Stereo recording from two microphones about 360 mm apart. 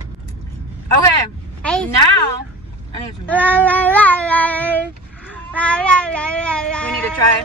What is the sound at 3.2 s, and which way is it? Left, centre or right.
Cat, centre.